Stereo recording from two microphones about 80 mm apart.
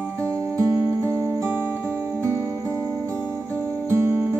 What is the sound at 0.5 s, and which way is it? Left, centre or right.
Music, right.